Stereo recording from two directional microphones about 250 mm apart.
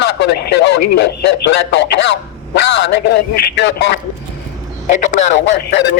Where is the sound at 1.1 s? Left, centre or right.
Left.